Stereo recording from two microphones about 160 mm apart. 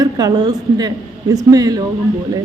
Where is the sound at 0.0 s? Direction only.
25° right (ahead or behind).